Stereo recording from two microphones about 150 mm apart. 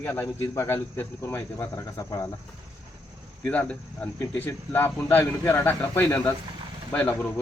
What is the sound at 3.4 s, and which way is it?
Speech, 10° left (ahead or behind).